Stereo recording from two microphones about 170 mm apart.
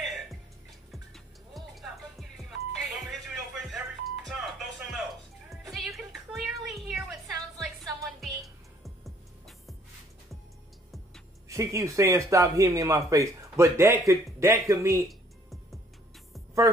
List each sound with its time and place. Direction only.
0.0 s music: centre (ahead or behind)
11.4 s speech: 20° right (ahead or behind)
15.0 s music: centre (ahead or behind)